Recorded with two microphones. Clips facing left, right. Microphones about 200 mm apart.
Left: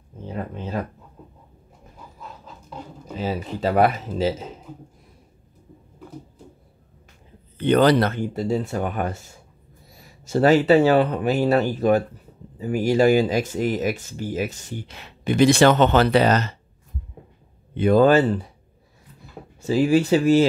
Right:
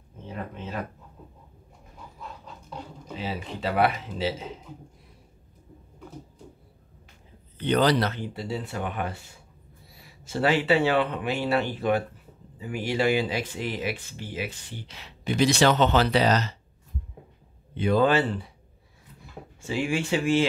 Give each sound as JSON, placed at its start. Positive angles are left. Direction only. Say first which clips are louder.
{"t": 0.3, "sound": "a sound", "louder": "left 5 dB", "side_deg": 35}
{"t": 3.2, "sound": "speech", "louder": "left 7 dB", "side_deg": 40}
{"t": 7.5, "sound": "speech", "louder": "left 6 dB", "side_deg": 55}
{"t": 17.7, "sound": "speech", "louder": "left 6 dB", "side_deg": 50}
{"t": 19.6, "sound": "speech", "louder": "left 9 dB", "side_deg": 40}